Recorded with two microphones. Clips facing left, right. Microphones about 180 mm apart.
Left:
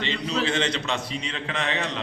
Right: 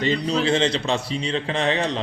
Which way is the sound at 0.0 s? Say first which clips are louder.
Right 5 dB; 40° right (ahead or behind).